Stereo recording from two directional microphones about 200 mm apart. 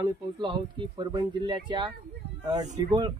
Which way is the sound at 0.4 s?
20° right (ahead or behind).